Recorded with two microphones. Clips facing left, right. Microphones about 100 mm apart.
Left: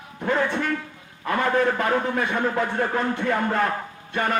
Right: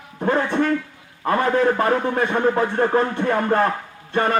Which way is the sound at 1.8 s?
35° right (ahead or behind).